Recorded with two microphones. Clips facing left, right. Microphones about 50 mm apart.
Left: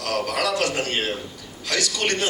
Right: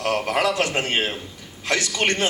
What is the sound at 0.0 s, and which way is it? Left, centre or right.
A man's voice, right.